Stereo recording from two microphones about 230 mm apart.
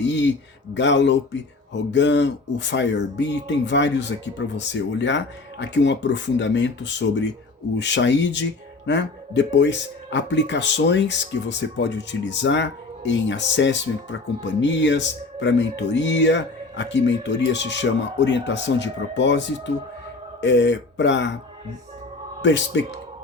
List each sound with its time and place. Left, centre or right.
0.0 s speech: left
22.4 s speech: left